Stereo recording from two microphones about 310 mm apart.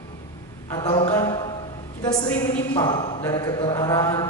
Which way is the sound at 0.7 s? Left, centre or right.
Centre.